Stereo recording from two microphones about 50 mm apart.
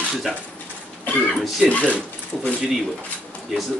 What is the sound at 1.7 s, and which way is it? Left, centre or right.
Speech, left.